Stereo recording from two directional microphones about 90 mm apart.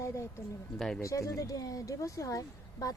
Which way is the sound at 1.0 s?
35° left (ahead or behind).